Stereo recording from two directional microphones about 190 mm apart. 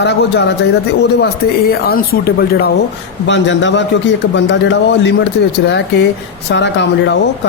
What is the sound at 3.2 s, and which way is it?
A man's voice, 75° left (ahead or behind).